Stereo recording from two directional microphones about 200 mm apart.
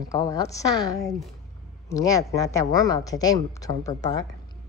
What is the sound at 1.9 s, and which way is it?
A woman's voice, 15° left (ahead or behind).